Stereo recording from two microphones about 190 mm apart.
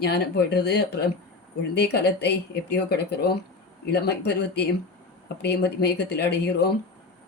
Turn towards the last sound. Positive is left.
turn(degrees=60)  # may be behind; listen again after turning